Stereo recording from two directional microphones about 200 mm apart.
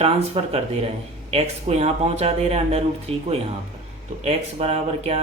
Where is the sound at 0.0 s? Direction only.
30° right (ahead or behind).